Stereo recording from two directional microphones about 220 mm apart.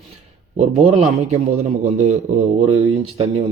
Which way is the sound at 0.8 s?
30° right (ahead or behind).